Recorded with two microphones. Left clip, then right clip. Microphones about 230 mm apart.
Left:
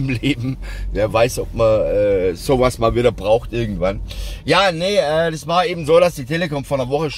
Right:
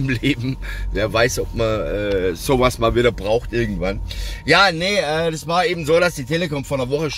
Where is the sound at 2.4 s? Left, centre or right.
Centre.